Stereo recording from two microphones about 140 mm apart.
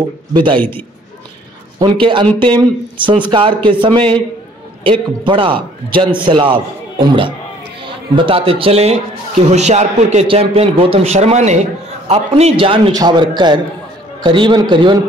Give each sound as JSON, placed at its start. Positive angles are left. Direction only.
{"t": 0.3, "sound": "speech", "side_deg": -35}
{"t": 1.8, "sound": "a man's voice", "side_deg": -35}